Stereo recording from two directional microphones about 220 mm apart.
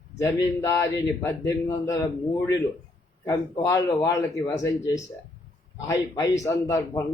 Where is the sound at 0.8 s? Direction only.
15° left (ahead or behind).